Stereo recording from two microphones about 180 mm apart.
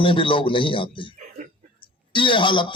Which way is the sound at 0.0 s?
30° left (ahead or behind).